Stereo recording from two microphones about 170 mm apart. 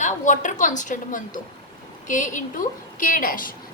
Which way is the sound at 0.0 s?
45° left (ahead or behind).